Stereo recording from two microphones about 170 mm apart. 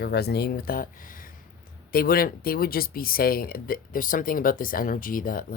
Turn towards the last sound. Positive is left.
turn(degrees=55)  # may be behind; listen again after turning